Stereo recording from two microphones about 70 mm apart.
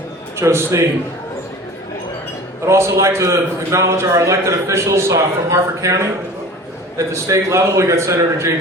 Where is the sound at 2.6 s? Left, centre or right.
Right.